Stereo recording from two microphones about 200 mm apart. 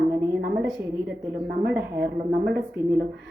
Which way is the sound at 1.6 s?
55° right (ahead or behind).